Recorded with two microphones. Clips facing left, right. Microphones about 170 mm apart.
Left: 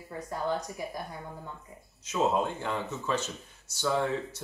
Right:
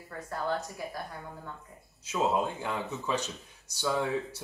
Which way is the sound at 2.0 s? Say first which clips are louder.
Left 1 dB; 10° right (ahead or behind).